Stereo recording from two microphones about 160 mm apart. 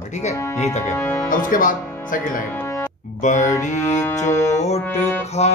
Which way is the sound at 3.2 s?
50° left (ahead or behind).